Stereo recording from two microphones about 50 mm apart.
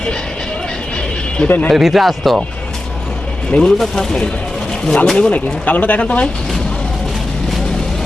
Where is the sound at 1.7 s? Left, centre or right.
Centre.